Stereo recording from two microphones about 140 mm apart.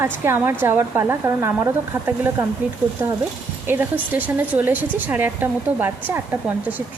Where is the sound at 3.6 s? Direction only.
15° right (ahead or behind).